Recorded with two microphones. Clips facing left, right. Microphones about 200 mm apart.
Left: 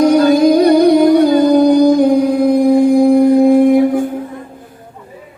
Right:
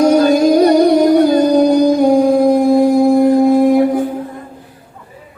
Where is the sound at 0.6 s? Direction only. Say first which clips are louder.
Left 1 dB; 45° right (ahead or behind).